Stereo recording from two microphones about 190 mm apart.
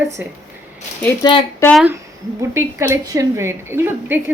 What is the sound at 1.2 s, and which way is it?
Speech, 25° left (ahead or behind).